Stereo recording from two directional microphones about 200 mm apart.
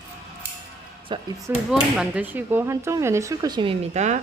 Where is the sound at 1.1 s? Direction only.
25° right (ahead or behind).